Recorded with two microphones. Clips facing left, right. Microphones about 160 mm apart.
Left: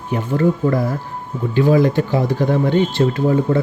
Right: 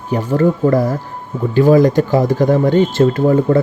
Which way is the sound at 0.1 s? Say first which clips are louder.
Right 3 dB; 40° right (ahead or behind).